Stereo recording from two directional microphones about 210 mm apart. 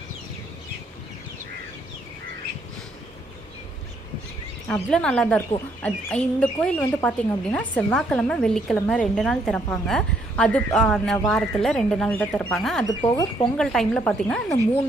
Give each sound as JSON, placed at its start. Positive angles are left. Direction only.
{"t": 4.6, "sound": "speech", "side_deg": 5}
{"t": 12.8, "sound": "speech", "side_deg": 20}
{"t": 13.6, "sound": "speech", "side_deg": 5}